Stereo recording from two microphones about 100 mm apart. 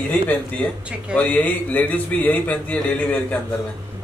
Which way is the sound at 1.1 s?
15° left (ahead or behind).